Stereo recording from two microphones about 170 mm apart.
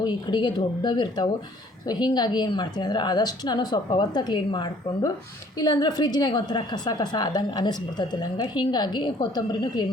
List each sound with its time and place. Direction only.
0.0 s a woman's voice: 25° left (ahead or behind)